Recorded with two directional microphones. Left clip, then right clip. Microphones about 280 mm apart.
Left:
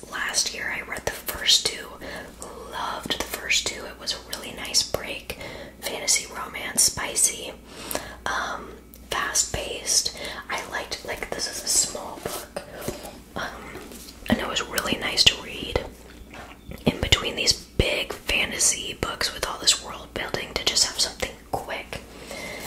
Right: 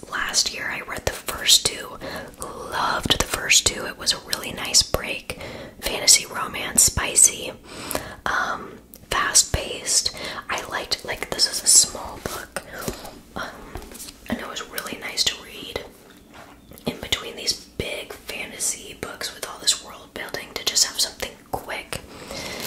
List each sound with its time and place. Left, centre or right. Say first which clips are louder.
0.1 s whispering: right 3 dB; right
5.9 s speech: right 7 dB; right
9.1 s whispering: right 5 dB; right
13.4 s whispering: even; centre
14.2 s whispering: left 5 dB; left
16.8 s whispering: left 4 dB; left
21.5 s whispering: even; centre